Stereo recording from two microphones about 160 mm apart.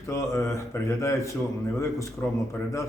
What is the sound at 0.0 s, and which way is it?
A man's voice, 20° left (ahead or behind).